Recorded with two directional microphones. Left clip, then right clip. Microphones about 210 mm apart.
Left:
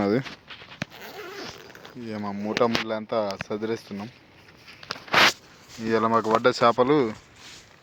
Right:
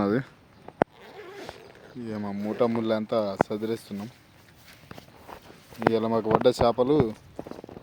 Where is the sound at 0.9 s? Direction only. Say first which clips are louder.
Left 5 dB; 50° left (ahead or behind).